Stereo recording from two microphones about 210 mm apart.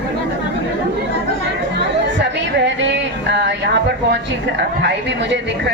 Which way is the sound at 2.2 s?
55° right (ahead or behind).